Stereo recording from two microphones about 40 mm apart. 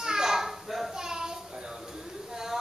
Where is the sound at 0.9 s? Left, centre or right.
Centre.